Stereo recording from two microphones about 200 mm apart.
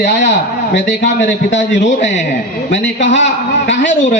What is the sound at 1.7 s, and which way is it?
Speech, 35° left (ahead or behind).